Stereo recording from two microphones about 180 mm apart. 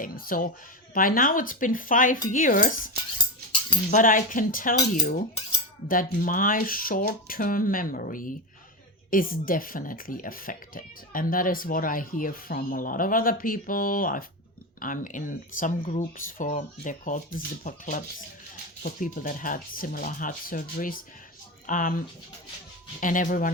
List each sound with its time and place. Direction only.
0.0 s speech: 50° left (ahead or behind)
3.9 s speech: 45° left (ahead or behind)
5.9 s speech: 50° left (ahead or behind)